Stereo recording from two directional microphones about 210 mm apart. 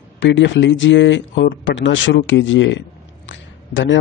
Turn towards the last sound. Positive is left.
turn(degrees=60)  # may be behind; listen again after turning